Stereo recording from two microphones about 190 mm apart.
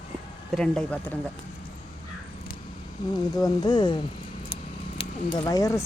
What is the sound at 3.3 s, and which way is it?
Speech, 20° left (ahead or behind).